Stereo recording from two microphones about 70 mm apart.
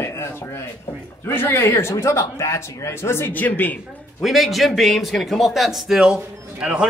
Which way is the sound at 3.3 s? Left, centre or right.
Left.